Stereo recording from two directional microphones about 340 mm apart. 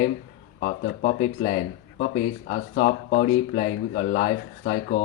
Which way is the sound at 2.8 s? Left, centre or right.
Left.